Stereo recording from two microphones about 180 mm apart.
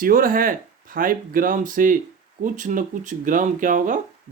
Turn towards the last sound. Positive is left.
turn(degrees=-45)  # may be behind; listen again after turning